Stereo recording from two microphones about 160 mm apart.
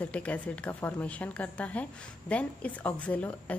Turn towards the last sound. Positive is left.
turn(degrees=10)  # may be behind; listen again after turning